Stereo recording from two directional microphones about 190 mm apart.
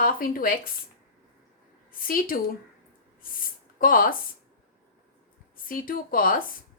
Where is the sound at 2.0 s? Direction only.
50° left (ahead or behind).